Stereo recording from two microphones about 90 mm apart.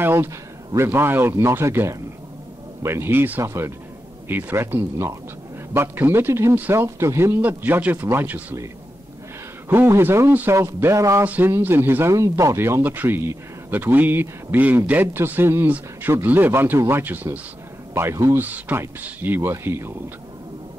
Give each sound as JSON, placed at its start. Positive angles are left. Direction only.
{"t": 0.0, "sound": "a man's voice", "side_deg": -25}
{"t": 7.4, "sound": "a man's voice", "side_deg": -20}
{"t": 9.7, "sound": "a man's voice", "side_deg": -25}
{"t": 11.2, "sound": "a man's voice", "side_deg": -20}
{"t": 12.1, "sound": "a man's voice", "side_deg": -35}